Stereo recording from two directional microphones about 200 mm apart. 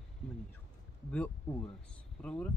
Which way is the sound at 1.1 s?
10° left (ahead or behind).